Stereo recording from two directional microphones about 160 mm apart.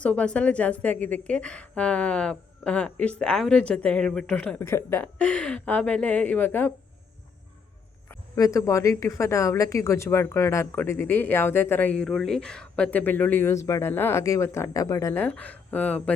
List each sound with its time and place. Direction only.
0.0 s speech: 5° left (ahead or behind)
8.4 s speech: 20° left (ahead or behind)